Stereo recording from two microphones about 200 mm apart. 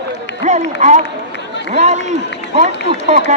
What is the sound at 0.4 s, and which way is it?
A man's voice, 35° right (ahead or behind).